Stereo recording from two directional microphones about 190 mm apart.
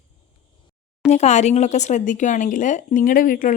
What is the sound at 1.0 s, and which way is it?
Speech, 35° left (ahead or behind).